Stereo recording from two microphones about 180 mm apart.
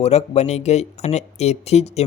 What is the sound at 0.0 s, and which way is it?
A man's voice, 35° left (ahead or behind).